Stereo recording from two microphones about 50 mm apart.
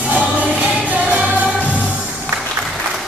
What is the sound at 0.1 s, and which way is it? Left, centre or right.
Music, right.